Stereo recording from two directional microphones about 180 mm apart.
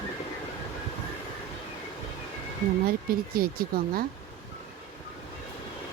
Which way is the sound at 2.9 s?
55° right (ahead or behind).